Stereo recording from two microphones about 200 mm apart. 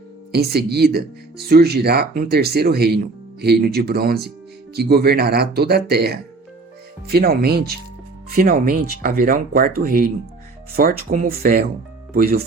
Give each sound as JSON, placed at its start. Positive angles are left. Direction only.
{"t": 0.3, "sound": "speech", "side_deg": -55}